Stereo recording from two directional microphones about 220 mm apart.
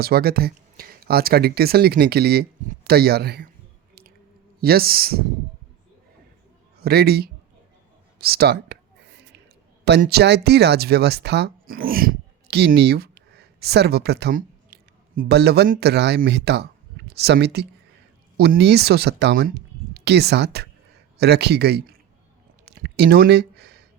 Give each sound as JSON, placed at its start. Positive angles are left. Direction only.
{"t": 0.0, "sound": "speech", "side_deg": -45}
{"t": 4.6, "sound": "speech", "side_deg": -45}
{"t": 6.8, "sound": "speech", "side_deg": -45}
{"t": 8.2, "sound": "whispering", "side_deg": -45}
{"t": 9.8, "sound": "speech", "side_deg": -45}
{"t": 22.6, "sound": "a sound", "side_deg": -45}